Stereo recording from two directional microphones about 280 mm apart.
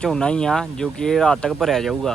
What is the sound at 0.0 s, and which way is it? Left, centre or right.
Speech, centre.